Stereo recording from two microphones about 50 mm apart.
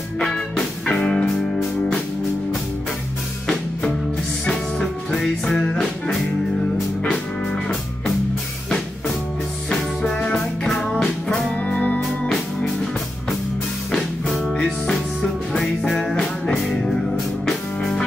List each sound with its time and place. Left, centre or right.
0.2 s music: centre
4.5 s music: centre
7.0 s music: centre
9.7 s music: centre
11.6 s music: left
13.9 s music: centre
17.5 s music: centre